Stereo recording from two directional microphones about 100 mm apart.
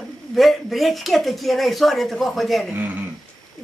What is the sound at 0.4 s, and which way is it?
Speech, centre (ahead or behind).